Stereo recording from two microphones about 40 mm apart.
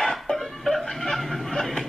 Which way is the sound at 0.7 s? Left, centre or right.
Centre.